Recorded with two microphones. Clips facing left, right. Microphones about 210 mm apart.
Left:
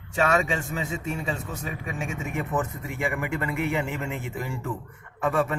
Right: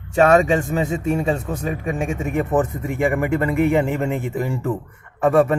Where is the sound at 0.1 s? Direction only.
50° right (ahead or behind).